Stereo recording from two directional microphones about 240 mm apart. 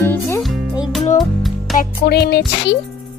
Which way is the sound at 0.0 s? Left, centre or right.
Centre.